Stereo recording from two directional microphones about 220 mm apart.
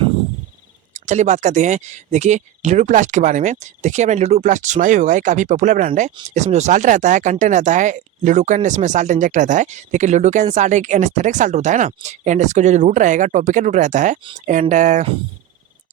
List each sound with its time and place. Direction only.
0.9 s speech: 30° right (ahead or behind)